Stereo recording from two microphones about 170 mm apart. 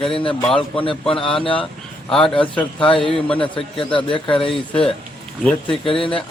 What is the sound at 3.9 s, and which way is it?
Speech, 30° left (ahead or behind).